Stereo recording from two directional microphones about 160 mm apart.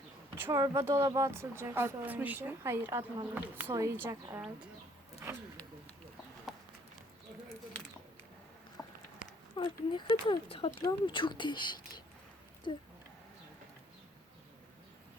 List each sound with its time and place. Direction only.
0.3 s speech: 15° right (ahead or behind)
6.5 s clip-clop: 5° right (ahead or behind)
9.6 s speech: 30° left (ahead or behind)